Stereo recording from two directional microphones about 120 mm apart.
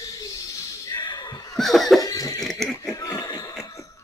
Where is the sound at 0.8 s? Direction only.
40° left (ahead or behind).